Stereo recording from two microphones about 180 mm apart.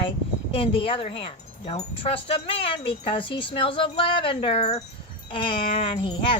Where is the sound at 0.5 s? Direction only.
30° left (ahead or behind).